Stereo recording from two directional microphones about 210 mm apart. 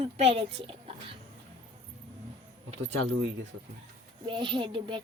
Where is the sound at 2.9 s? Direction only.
60° right (ahead or behind).